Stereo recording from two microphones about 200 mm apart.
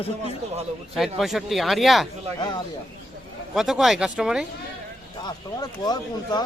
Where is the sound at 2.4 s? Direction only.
20° left (ahead or behind).